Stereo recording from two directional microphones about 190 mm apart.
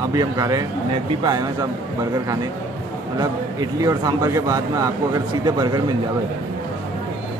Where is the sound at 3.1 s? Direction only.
20° right (ahead or behind).